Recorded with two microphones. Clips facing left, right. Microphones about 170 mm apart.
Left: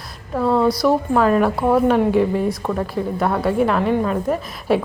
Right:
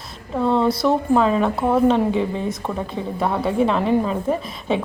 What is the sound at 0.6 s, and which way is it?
Speech, 25° right (ahead or behind).